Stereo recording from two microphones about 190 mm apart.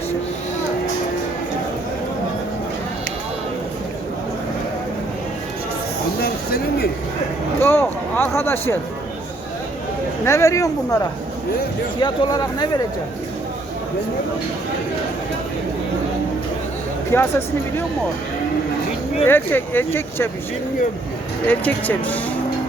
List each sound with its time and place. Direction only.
6.2 s a sound: 55° left (ahead or behind)
7.6 s a sound: 10° left (ahead or behind)
10.2 s speech: 15° left (ahead or behind)
17.1 s speech: 10° left (ahead or behind)
19.2 s speech: 10° left (ahead or behind)
21.4 s speech: 10° left (ahead or behind)